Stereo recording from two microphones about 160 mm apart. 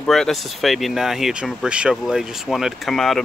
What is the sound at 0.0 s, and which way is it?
Speech, 5° left (ahead or behind).